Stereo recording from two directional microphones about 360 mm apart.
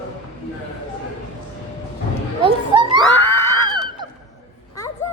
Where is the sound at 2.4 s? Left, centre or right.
Centre.